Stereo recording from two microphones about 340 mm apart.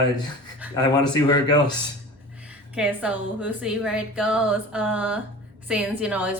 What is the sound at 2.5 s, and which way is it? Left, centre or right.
A woman's voice, centre.